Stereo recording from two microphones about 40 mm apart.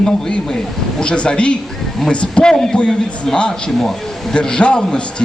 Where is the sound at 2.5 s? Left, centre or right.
Centre.